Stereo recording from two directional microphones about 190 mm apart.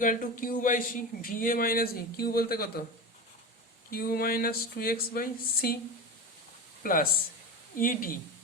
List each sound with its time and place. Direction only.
0.0 s a man's voice: 45° left (ahead or behind)
3.9 s a man's voice: 50° left (ahead or behind)
6.8 s a man's voice: 50° left (ahead or behind)